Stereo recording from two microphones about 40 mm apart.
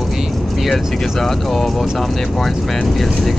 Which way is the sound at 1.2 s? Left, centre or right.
Centre.